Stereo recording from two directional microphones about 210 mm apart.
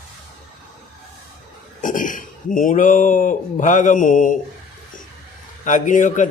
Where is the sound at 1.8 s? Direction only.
40° left (ahead or behind).